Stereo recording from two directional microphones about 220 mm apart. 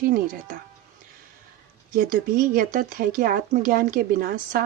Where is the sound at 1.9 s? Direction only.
40° right (ahead or behind).